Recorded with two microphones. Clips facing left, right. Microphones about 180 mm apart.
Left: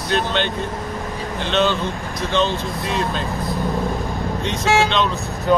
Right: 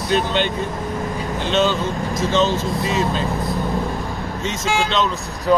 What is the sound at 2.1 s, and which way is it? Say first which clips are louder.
Speech: right 4 dB; 45° right (ahead or behind).